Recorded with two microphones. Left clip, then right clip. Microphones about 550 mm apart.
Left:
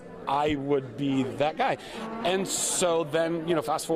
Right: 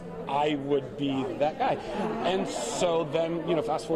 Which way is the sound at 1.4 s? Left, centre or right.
Left.